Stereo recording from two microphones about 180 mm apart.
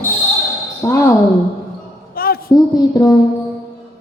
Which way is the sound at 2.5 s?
20° left (ahead or behind).